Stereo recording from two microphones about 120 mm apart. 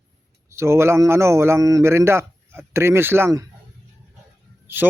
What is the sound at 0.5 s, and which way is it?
Speech, 25° right (ahead or behind).